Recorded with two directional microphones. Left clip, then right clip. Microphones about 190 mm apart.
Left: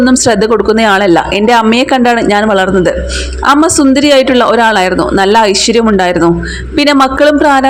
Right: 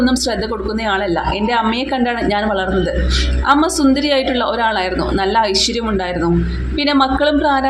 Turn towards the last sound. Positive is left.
turn(degrees=40)  # may be behind; listen again after turning